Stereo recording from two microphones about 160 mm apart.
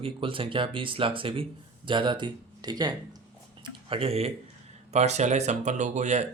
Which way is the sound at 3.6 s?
35° right (ahead or behind).